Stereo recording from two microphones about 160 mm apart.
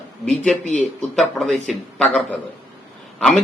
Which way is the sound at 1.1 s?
Centre (ahead or behind).